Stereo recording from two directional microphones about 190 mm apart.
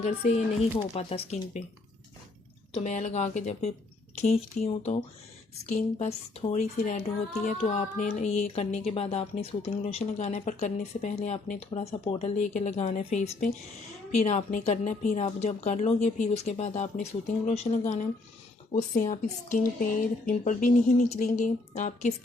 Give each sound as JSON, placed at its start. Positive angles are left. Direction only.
{"t": 0.0, "sound": "speech", "side_deg": 35}
{"t": 2.7, "sound": "speech", "side_deg": 40}